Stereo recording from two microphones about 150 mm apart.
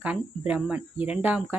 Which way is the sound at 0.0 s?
10° right (ahead or behind).